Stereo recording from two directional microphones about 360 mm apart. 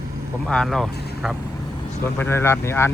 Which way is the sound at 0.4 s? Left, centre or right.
Centre.